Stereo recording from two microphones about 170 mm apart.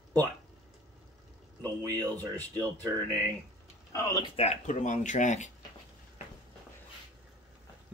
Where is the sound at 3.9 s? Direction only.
25° left (ahead or behind).